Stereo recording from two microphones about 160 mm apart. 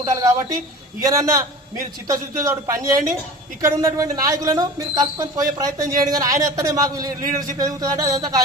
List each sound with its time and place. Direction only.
0.0 s a man's voice: 20° right (ahead or behind)